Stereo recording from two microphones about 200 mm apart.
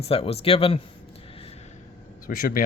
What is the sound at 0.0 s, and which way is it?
Speech, 30° left (ahead or behind).